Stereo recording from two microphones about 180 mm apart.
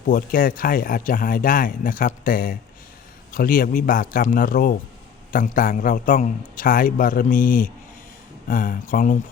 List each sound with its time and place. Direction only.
0.1 s speech: 50° left (ahead or behind)